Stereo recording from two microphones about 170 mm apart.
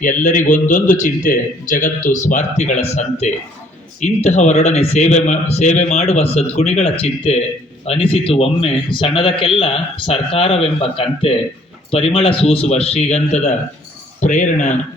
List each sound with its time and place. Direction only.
0.2 s a man's voice: 50° left (ahead or behind)